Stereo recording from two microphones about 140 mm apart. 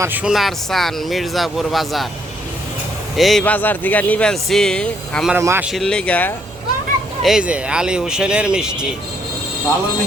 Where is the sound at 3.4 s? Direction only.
10° left (ahead or behind).